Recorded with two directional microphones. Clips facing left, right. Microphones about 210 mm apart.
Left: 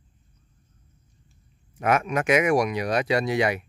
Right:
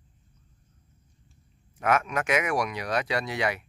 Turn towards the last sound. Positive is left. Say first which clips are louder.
# left 6 dB
turn(degrees=15)  # may be behind; listen again after turning